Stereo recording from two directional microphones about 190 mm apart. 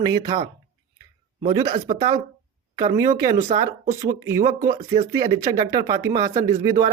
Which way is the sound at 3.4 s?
40° right (ahead or behind).